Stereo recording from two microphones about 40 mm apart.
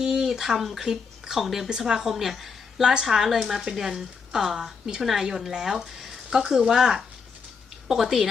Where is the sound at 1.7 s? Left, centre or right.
Centre.